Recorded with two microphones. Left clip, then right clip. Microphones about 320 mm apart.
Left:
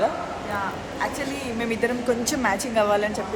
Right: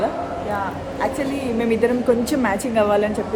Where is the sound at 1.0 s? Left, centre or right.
Centre.